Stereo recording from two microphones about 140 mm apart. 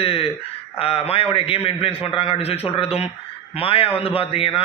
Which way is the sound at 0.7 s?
45° left (ahead or behind).